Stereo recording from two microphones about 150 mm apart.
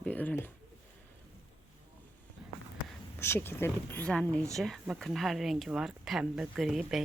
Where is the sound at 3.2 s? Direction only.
15° left (ahead or behind).